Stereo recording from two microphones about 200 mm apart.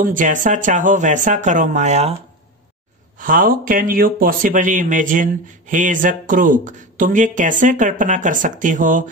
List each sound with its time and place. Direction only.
0.0 s speech: 40° right (ahead or behind)
3.2 s speech: 40° right (ahead or behind)